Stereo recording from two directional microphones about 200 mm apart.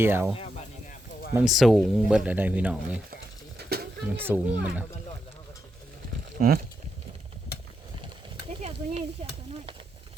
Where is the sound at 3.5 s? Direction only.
50° right (ahead or behind).